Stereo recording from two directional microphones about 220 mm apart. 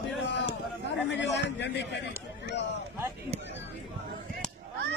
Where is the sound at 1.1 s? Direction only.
55° left (ahead or behind).